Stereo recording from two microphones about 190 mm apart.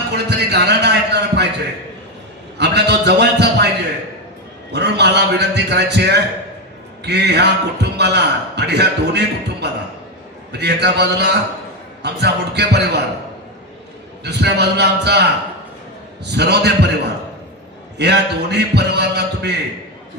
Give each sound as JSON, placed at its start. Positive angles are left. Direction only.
{"t": 0.3, "sound": "a sound", "side_deg": -60}
{"t": 2.6, "sound": "a man's voice", "side_deg": -60}
{"t": 4.7, "sound": "a man's voice", "side_deg": -60}
{"t": 14.3, "sound": "a man's voice", "side_deg": -60}